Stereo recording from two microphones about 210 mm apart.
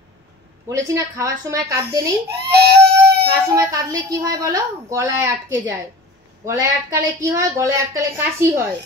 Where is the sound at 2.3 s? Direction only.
50° right (ahead or behind).